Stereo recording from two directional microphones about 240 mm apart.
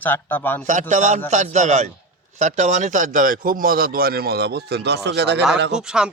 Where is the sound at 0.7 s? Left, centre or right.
Right.